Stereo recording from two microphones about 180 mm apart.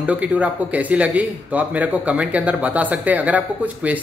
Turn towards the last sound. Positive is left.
turn(degrees=-10)  # may be behind; listen again after turning